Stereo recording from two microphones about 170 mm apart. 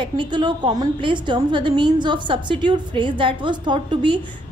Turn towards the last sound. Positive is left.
turn(degrees=-30)  # may be behind; listen again after turning